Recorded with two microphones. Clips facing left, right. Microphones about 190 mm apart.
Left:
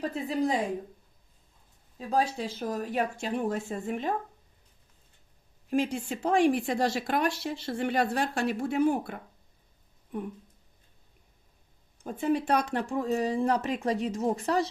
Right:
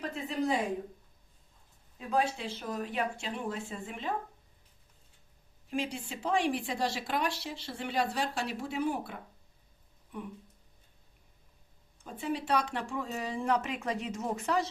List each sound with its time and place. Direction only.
0.0 s speech: 35° left (ahead or behind)
2.0 s speech: 35° left (ahead or behind)
5.7 s speech: 45° left (ahead or behind)
12.0 s speech: 50° left (ahead or behind)